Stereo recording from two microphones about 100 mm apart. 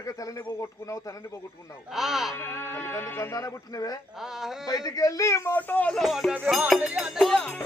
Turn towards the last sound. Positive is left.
turn(degrees=10)  # may be behind; listen again after turning